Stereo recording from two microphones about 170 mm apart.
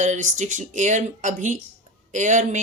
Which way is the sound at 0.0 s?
45° right (ahead or behind).